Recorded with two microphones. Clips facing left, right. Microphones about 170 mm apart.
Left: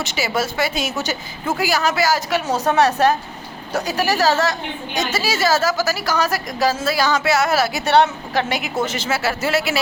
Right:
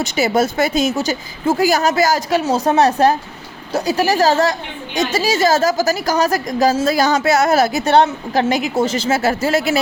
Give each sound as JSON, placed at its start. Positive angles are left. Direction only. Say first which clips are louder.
{"t": 0.0, "sound": "a woman's voice", "louder": "right 6 dB", "side_deg": -40}